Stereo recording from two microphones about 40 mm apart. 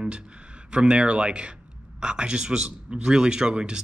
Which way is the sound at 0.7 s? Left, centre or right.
Right.